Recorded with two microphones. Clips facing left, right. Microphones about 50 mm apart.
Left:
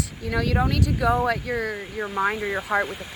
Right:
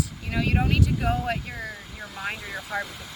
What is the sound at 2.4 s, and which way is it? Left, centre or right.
Speech, left.